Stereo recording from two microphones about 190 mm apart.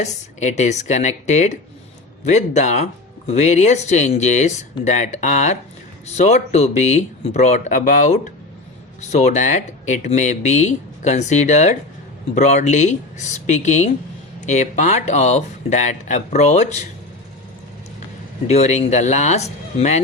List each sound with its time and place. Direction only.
0.0 s speech: 40° left (ahead or behind)
18.4 s speech: 35° left (ahead or behind)